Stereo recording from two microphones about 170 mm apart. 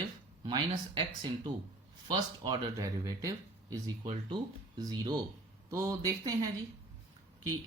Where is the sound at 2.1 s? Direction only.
20° right (ahead or behind).